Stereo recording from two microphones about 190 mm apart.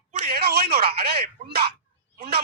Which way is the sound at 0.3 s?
55° right (ahead or behind).